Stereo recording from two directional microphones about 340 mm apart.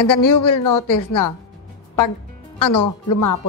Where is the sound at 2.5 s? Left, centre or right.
Left.